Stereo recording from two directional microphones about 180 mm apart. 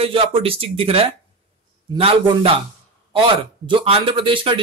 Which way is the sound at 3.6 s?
30° right (ahead or behind).